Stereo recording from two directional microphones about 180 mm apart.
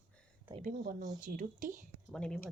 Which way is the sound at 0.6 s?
50° right (ahead or behind).